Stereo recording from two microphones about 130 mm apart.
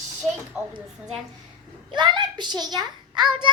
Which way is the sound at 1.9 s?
35° right (ahead or behind).